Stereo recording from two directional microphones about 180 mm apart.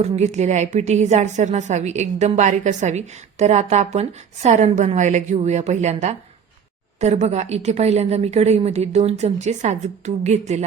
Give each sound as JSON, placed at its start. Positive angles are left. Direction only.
{"t": 0.0, "sound": "a woman's voice", "side_deg": -40}